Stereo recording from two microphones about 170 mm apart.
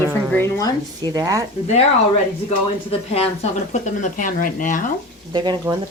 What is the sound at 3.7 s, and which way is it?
Speech, 50° left (ahead or behind).